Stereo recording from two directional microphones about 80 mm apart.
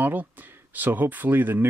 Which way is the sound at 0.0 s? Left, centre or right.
Right.